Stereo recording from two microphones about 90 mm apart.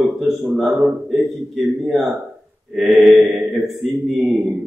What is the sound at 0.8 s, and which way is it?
A man's voice, centre (ahead or behind).